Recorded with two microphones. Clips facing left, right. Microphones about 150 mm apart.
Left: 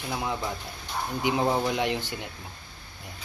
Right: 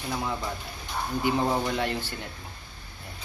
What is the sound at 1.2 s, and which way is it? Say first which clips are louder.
Speech: even; 15° left (ahead or behind).